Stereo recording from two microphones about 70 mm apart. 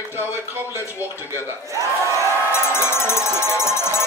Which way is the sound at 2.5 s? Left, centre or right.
Left.